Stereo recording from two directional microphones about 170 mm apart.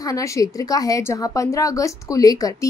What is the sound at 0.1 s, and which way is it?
A woman's voice, 20° left (ahead or behind).